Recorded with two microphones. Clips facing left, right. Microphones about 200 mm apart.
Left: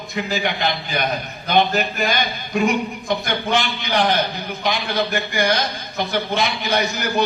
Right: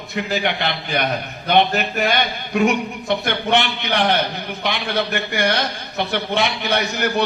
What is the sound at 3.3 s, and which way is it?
A man's voice, 65° right (ahead or behind).